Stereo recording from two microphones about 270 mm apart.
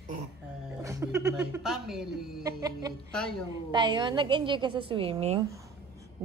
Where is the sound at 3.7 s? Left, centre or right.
Centre.